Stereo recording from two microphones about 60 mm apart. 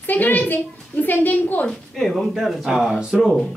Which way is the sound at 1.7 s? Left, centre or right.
Centre.